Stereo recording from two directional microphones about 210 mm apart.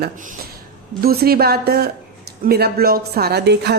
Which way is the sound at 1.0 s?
45° right (ahead or behind).